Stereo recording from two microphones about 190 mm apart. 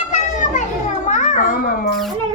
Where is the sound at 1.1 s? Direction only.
40° left (ahead or behind).